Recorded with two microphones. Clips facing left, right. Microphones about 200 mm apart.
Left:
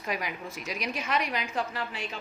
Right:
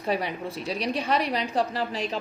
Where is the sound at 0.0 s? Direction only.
30° right (ahead or behind).